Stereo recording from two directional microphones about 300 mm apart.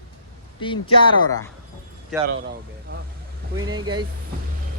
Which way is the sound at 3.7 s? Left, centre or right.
Centre.